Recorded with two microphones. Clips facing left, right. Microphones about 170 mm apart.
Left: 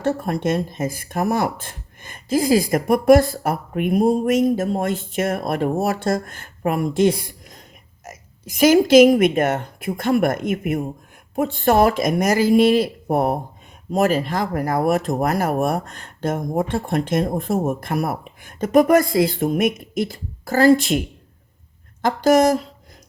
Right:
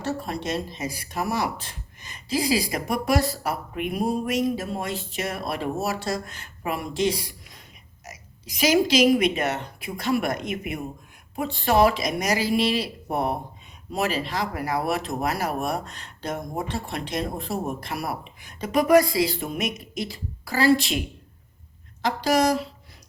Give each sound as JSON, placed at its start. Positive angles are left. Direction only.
{"t": 0.0, "sound": "speech", "side_deg": 50}
{"t": 22.0, "sound": "speech", "side_deg": 50}